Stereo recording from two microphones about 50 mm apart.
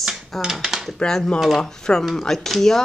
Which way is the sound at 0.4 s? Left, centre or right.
Centre.